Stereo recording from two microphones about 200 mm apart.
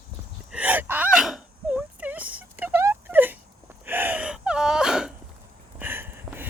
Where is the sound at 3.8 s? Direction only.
10° right (ahead or behind).